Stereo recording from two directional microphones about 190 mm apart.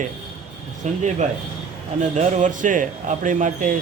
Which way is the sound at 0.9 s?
40° right (ahead or behind).